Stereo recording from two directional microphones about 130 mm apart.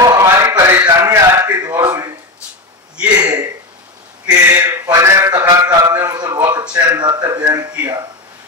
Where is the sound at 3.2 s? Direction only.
30° right (ahead or behind).